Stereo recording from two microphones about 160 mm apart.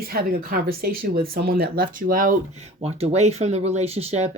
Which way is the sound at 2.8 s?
40° right (ahead or behind).